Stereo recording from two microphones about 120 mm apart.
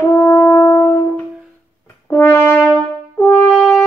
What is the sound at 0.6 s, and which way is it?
Music, 30° left (ahead or behind).